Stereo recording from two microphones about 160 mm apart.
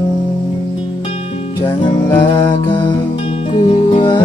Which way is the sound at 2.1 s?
30° left (ahead or behind).